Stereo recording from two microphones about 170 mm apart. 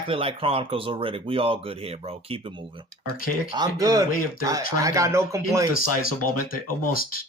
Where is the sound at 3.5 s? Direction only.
20° right (ahead or behind).